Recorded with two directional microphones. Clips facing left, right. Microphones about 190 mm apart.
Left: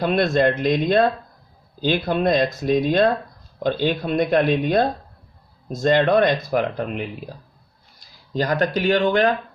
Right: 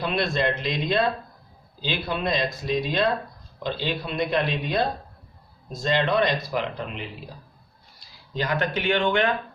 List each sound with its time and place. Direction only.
0.0 s speech: 50° left (ahead or behind)